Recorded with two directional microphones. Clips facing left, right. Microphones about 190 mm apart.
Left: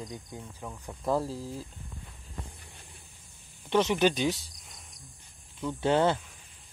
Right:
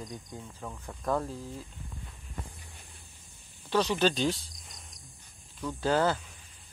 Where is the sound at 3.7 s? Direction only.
20° left (ahead or behind).